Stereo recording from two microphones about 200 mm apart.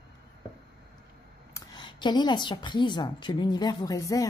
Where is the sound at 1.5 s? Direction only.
20° left (ahead or behind).